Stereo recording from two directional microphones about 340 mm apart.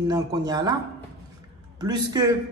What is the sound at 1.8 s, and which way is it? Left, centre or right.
Speech, centre.